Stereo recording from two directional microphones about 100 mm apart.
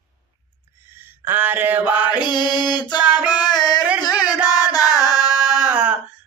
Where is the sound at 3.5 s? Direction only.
45° left (ahead or behind).